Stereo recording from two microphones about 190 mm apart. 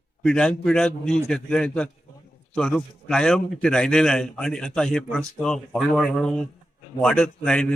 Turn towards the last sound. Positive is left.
turn(degrees=5)  # may be behind; listen again after turning